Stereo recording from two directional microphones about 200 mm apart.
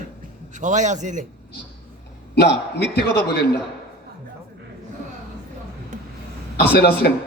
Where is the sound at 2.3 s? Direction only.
55° left (ahead or behind).